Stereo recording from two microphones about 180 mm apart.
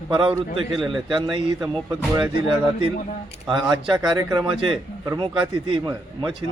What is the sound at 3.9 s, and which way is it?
A man's voice, 20° right (ahead or behind).